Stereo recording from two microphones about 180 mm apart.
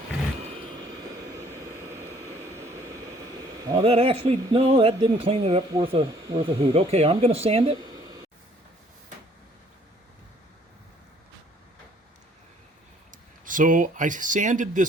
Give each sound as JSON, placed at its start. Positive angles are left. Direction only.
{"t": 1.3, "sound": "jet engine", "side_deg": -15}
{"t": 3.6, "sound": "speech", "side_deg": -20}
{"t": 13.4, "sound": "speech", "side_deg": -45}